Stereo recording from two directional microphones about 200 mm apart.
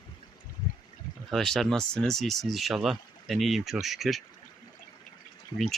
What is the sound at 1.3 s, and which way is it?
Speech, centre (ahead or behind).